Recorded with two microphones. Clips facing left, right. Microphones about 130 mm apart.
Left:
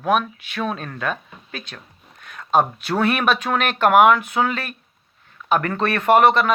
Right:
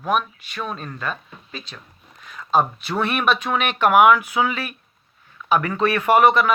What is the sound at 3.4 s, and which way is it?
Speech, 45° left (ahead or behind).